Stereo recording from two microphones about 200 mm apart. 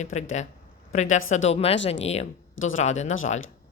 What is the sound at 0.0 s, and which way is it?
Speech, 35° left (ahead or behind).